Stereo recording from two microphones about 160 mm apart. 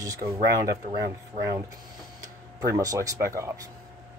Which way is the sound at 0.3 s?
20° right (ahead or behind).